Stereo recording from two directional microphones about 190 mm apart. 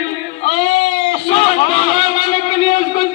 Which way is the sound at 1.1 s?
30° left (ahead or behind).